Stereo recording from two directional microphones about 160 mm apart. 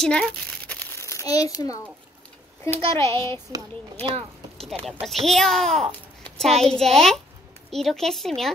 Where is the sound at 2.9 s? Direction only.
15° left (ahead or behind).